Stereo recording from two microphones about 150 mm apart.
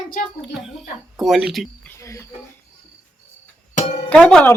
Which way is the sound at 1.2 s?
Centre (ahead or behind).